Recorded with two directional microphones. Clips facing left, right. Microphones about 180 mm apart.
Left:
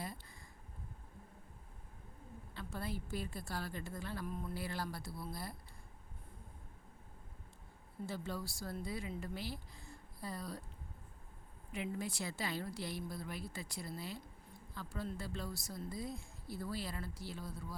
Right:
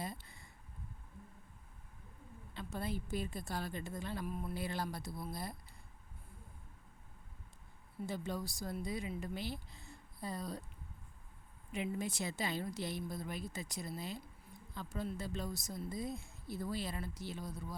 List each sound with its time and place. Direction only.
0.0 s a sound: 20° right (ahead or behind)
2.6 s speech: 20° right (ahead or behind)
4.3 s a man's voice: 10° right (ahead or behind)
4.5 s speech: 20° right (ahead or behind)
8.0 s speech: 20° right (ahead or behind)
11.7 s speech: 20° right (ahead or behind)